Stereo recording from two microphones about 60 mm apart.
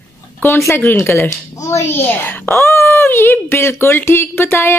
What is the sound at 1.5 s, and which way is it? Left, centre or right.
Speech, left.